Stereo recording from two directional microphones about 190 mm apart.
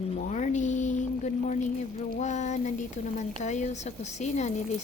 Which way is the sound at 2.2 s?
40° left (ahead or behind).